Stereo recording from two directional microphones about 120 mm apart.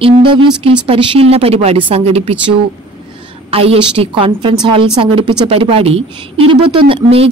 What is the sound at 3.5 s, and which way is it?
Speech, 55° right (ahead or behind).